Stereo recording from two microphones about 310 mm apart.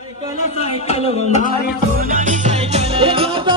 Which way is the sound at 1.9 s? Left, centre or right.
Right.